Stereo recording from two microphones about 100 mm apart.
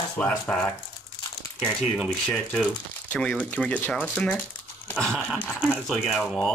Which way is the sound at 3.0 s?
15° left (ahead or behind).